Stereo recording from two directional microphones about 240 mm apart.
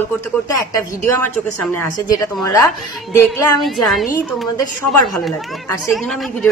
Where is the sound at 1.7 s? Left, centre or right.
Centre.